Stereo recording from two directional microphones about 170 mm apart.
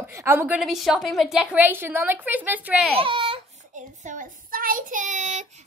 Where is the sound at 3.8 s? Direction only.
50° right (ahead or behind).